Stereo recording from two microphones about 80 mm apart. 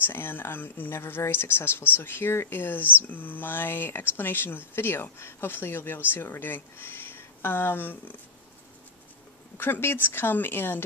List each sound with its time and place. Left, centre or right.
0.0 s speech: left
9.6 s speech: left